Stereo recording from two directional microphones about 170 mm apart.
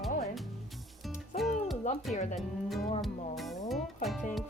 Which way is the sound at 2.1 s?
45° left (ahead or behind).